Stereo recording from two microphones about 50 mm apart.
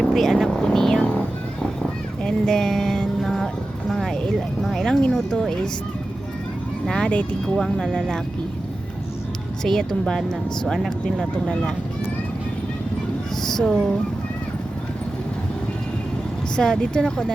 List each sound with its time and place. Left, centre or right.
0.0 s speech: centre
2.2 s speech: centre
3.2 s vehicle: centre
4.6 s speech: centre
6.8 s speech: centre
7.4 s speech: centre
9.6 s speech: centre
13.3 s speech: centre
16.6 s speech: centre